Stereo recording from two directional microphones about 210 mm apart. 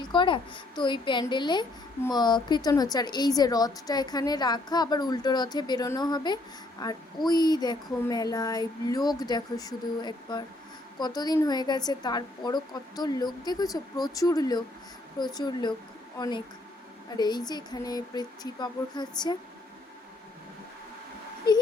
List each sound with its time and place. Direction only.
0.0 s a woman's voice: 20° left (ahead or behind)